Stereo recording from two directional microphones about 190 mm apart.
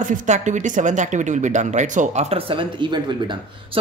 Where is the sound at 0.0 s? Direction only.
40° right (ahead or behind).